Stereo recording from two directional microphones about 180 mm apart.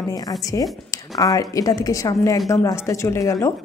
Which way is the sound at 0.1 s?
20° left (ahead or behind).